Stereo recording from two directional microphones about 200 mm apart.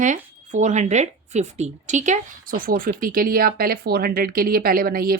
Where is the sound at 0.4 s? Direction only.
40° right (ahead or behind).